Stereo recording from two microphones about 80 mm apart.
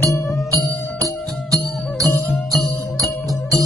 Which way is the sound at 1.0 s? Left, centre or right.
Right.